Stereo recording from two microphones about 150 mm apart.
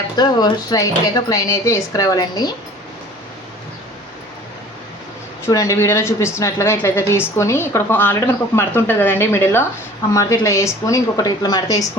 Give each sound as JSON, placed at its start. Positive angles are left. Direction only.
{"t": 0.2, "sound": "speech", "side_deg": 25}
{"t": 5.5, "sound": "a woman's voice", "side_deg": 20}